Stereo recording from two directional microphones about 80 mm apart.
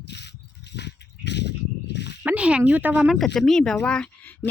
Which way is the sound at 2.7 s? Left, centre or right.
Centre.